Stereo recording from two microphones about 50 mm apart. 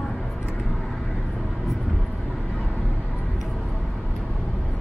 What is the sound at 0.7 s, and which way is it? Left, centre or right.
Vehicle, centre.